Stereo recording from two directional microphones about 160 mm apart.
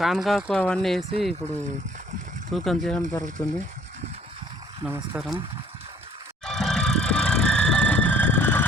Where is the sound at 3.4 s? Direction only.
50° right (ahead or behind); by 6.3 s 35° right (ahead or behind).